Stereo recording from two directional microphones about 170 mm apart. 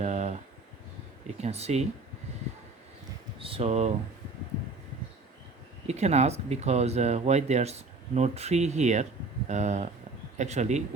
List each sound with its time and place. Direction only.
0.0 s a sound: 40° right (ahead or behind)
1.4 s speech: 40° right (ahead or behind)
3.3 s speech: 30° right (ahead or behind)
5.9 s speech: 40° right (ahead or behind)